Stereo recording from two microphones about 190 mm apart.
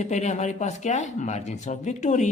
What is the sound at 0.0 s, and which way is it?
Speech, 35° left (ahead or behind).